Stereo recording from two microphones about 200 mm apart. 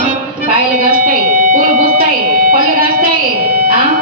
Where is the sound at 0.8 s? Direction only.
45° right (ahead or behind).